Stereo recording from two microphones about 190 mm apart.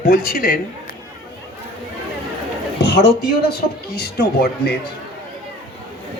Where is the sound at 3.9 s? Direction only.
60° left (ahead or behind).